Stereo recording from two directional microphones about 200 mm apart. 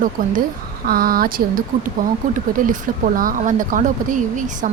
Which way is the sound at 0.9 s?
45° right (ahead or behind).